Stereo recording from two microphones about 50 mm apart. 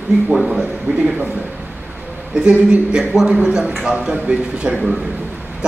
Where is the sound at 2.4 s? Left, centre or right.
Centre.